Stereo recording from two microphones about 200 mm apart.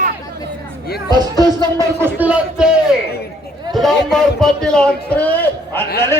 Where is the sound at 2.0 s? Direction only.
10° right (ahead or behind).